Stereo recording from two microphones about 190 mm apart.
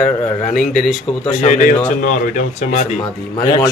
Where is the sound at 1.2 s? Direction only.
40° left (ahead or behind).